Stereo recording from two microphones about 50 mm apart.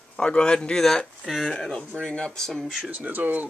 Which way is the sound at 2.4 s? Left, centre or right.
Centre.